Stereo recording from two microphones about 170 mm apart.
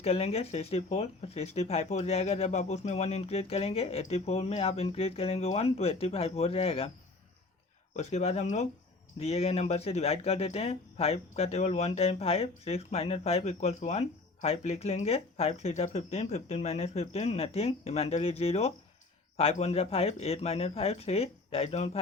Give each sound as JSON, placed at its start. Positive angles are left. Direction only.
{"t": 0.0, "sound": "speech", "side_deg": 40}
{"t": 7.9, "sound": "speech", "side_deg": 40}